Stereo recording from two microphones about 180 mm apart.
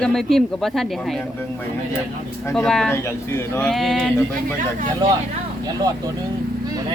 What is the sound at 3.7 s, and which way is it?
Speech, centre (ahead or behind).